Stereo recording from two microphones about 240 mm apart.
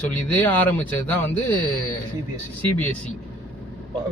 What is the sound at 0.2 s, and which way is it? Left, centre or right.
Speech, centre.